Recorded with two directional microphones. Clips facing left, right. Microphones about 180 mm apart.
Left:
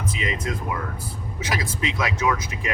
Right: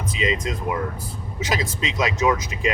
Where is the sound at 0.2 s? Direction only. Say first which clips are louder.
Right 3 dB; 20° right (ahead or behind).